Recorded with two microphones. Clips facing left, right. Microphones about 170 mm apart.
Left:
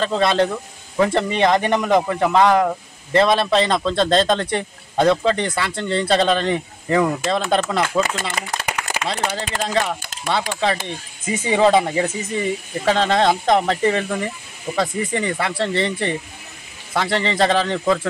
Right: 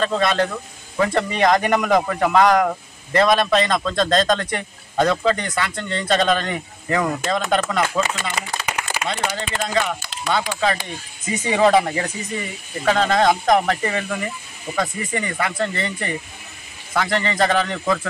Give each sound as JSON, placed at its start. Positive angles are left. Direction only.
{"t": 0.0, "sound": "a man's voice", "side_deg": 30}
{"t": 8.4, "sound": "a sound", "side_deg": 50}
{"t": 9.0, "sound": "a man's voice", "side_deg": 35}